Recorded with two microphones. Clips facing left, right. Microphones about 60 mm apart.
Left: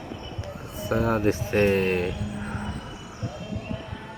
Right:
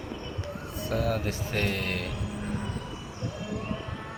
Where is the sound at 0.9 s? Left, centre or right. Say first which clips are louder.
Left 6 dB; left.